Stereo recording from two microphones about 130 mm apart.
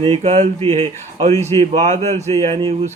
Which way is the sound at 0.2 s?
60° right (ahead or behind).